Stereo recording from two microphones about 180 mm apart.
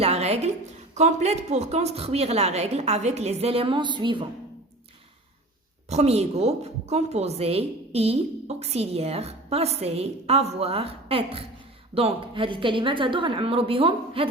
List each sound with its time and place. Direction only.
0.0 s a woman's voice: 35° right (ahead or behind)
5.9 s a woman's voice: 35° right (ahead or behind)